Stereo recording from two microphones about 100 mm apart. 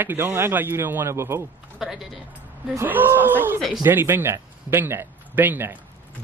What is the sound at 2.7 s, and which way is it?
Speech, 20° right (ahead or behind).